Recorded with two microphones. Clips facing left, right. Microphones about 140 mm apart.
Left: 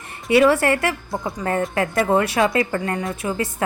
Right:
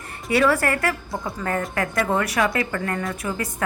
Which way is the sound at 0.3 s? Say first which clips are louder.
Left 4 dB; 25° left (ahead or behind).